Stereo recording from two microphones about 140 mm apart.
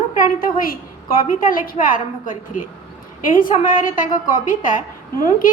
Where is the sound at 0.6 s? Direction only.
90° left.